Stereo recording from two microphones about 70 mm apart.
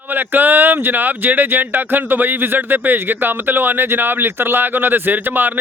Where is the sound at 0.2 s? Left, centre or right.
Right.